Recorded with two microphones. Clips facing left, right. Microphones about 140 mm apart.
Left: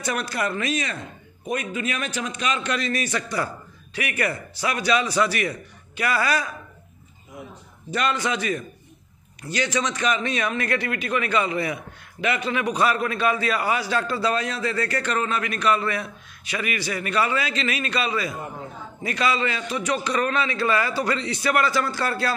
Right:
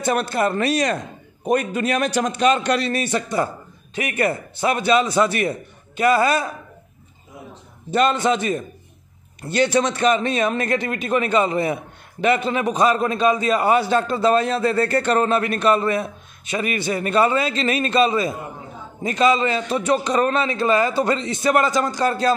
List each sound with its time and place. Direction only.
0.0 s a man's voice: 25° right (ahead or behind)
7.9 s a man's voice: 25° right (ahead or behind)
9.7 s a man's voice: 55° right (ahead or behind)
9.9 s a man's voice: 30° right (ahead or behind)